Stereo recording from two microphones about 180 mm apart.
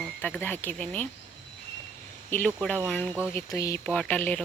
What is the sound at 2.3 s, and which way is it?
Speech, 10° left (ahead or behind).